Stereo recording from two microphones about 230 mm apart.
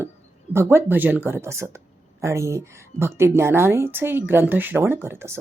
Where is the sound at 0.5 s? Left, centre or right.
Centre.